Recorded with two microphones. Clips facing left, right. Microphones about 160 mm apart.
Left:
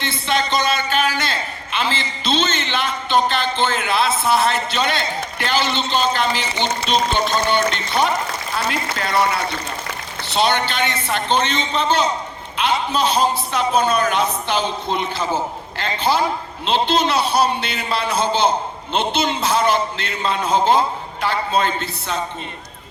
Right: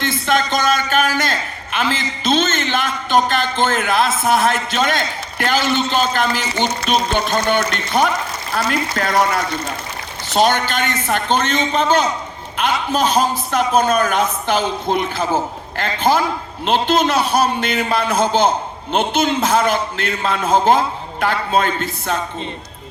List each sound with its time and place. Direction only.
0.0 s a man's voice: 45° right (ahead or behind)